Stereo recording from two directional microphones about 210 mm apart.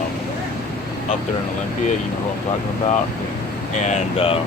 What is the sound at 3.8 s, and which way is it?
Speech, 30° left (ahead or behind).